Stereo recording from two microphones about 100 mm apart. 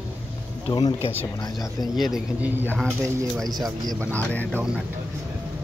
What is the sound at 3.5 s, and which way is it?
Speech, 40° right (ahead or behind).